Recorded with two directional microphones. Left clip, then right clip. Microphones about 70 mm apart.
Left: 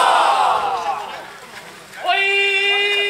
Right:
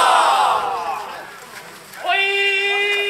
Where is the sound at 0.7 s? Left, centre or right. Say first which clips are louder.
Left 2 dB; left.